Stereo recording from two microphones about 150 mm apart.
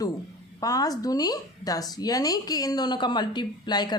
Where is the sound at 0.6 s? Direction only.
25° left (ahead or behind).